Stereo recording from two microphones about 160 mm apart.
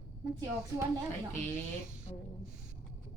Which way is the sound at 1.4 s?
15° left (ahead or behind).